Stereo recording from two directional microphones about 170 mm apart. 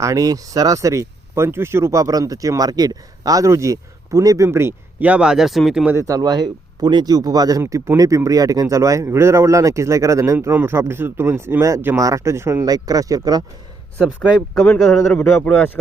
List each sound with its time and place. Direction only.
0.0 s speech: 20° right (ahead or behind)
14.2 s speech: 5° left (ahead or behind)